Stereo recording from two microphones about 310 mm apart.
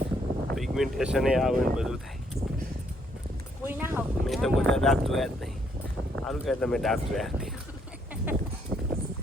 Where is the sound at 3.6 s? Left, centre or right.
Centre.